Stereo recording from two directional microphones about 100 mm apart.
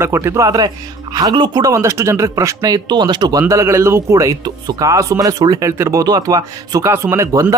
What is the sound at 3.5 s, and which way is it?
Speech, 30° right (ahead or behind).